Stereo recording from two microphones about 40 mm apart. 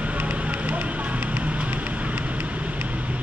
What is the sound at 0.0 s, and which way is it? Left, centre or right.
Fire, right.